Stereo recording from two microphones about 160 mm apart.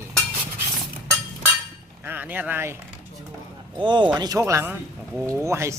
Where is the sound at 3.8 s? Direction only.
30° right (ahead or behind).